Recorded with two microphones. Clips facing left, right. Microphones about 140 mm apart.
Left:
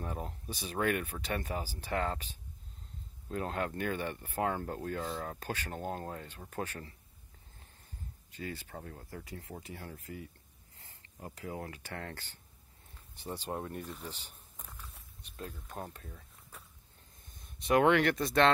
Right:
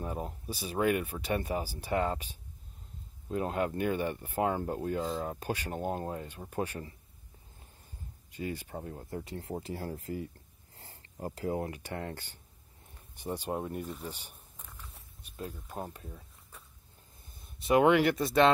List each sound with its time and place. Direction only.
0.0 s speech: 10° right (ahead or behind)
8.3 s speech: 15° right (ahead or behind); by 10.3 s 35° right (ahead or behind)
10.8 s a sound: 30° right (ahead or behind)
11.7 s speech: 20° right (ahead or behind)
17.4 s speech: centre (ahead or behind)